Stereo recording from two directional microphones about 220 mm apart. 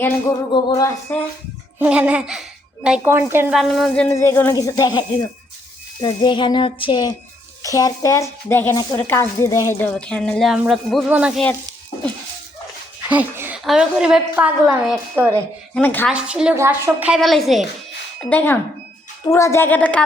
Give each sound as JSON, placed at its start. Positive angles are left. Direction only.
{"t": 0.5, "sound": "speech", "side_deg": 15}
{"t": 1.8, "sound": "a woman's voice", "side_deg": -5}
{"t": 3.6, "sound": "speech", "side_deg": 0}
{"t": 13.1, "sound": "a woman's voice", "side_deg": -10}
{"t": 15.7, "sound": "speech", "side_deg": 10}
{"t": 16.1, "sound": "a woman's voice", "side_deg": -5}